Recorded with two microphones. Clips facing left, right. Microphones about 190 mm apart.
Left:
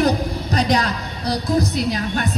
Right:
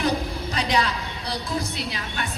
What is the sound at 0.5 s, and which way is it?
A woman's voice, 40° left (ahead or behind).